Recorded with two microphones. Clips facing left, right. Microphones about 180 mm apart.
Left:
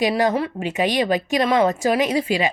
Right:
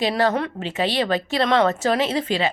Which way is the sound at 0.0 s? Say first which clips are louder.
Left 1 dB; 15° left (ahead or behind).